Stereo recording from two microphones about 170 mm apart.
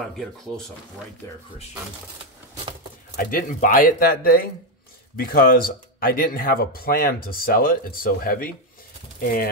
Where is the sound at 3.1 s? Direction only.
55° left (ahead or behind).